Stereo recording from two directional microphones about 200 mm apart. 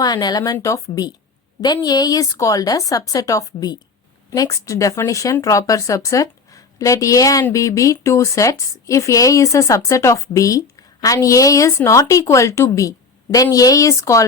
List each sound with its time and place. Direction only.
0.0 s speech: 20° left (ahead or behind)